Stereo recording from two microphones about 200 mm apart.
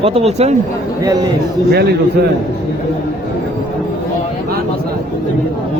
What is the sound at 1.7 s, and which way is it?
Speech, 55° right (ahead or behind).